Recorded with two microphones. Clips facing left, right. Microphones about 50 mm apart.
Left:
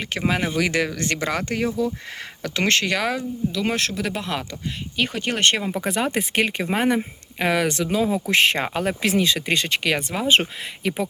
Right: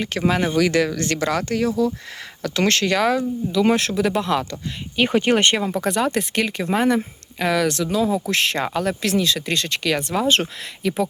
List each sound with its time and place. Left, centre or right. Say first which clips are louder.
0.0 s speech: right 3 dB; centre
2.9 s speech: right 5 dB; centre
4.5 s speech: right 3 dB; right
5.6 s speech: right 3 dB; centre
10.0 s speech: right 1 dB; centre